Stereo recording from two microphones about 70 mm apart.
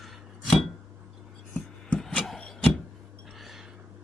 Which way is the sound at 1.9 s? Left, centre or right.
Centre.